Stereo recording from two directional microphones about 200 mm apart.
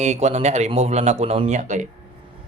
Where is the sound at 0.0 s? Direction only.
35° right (ahead or behind).